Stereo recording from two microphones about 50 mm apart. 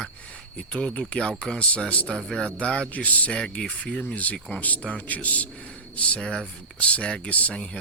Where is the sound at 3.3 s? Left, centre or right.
Centre.